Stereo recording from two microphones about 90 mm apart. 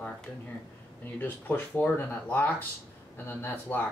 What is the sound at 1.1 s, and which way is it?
Speech, 20° left (ahead or behind).